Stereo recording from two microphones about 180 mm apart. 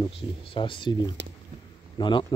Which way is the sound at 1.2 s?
80° right.